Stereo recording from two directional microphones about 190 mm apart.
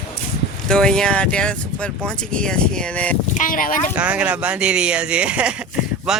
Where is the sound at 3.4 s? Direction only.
45° left (ahead or behind).